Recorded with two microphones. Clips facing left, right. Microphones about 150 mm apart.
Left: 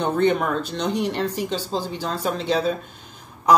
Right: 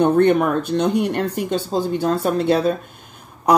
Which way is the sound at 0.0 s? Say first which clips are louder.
Right 6 dB; 55° right (ahead or behind).